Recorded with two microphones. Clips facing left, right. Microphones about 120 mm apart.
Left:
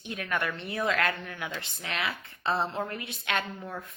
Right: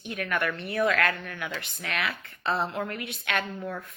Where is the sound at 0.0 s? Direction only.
25° left (ahead or behind).